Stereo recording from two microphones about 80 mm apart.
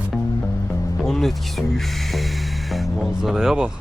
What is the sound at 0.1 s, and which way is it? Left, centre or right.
Music, centre.